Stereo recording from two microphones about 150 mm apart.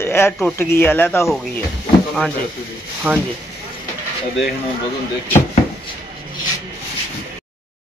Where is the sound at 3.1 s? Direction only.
10° right (ahead or behind).